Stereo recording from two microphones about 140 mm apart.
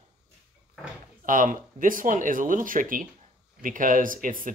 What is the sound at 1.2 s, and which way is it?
Speech, 70° right (ahead or behind).